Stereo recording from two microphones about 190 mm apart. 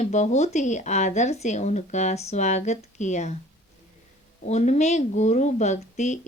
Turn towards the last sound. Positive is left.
turn(degrees=40)  # may be behind; listen again after turning